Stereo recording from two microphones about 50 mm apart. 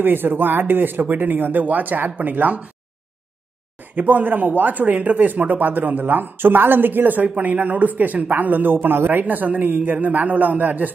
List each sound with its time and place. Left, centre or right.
0.0 s speech: right
3.9 s speech: right